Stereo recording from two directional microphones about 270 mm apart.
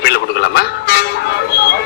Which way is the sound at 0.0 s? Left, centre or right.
Left.